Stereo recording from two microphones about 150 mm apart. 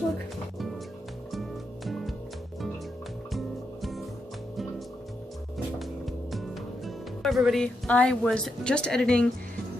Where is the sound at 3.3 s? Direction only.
Centre (ahead or behind).